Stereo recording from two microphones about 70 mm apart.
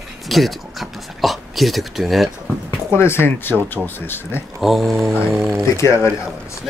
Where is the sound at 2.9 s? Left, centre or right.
Left.